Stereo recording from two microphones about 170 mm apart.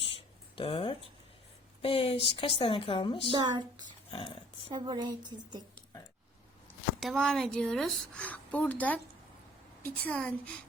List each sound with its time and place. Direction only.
0.0 s a sound: 30° left (ahead or behind)
1.8 s a woman's voice: 35° left (ahead or behind)
3.3 s a woman's voice: 25° right (ahead or behind)
4.1 s a woman's voice: 35° left (ahead or behind)
4.7 s a woman's voice: 25° right (ahead or behind)
7.0 s a woman's voice: centre (ahead or behind)